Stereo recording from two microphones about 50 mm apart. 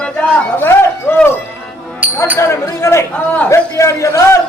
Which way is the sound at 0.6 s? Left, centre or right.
Left.